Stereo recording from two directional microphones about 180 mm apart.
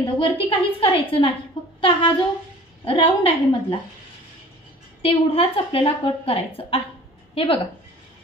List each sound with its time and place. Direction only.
0.0 s a woman's voice: 30° left (ahead or behind)
5.0 s a woman's voice: 30° left (ahead or behind)